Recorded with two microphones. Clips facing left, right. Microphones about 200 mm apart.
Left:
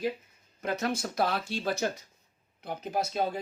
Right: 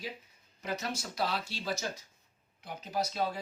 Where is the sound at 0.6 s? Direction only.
55° left (ahead or behind).